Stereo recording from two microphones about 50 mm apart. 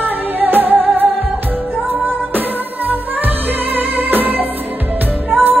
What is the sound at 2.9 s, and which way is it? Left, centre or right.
Music, right.